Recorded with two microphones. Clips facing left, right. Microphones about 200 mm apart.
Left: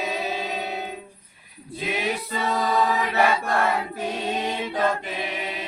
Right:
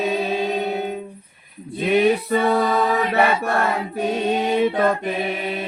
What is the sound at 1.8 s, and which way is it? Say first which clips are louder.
Chant: right 11 dB; 60° right (ahead or behind).